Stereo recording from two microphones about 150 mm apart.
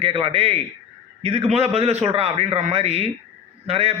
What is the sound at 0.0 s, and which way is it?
A man's voice, 40° right (ahead or behind).